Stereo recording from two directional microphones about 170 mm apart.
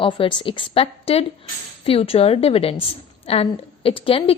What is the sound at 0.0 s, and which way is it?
A woman's voice, 30° left (ahead or behind).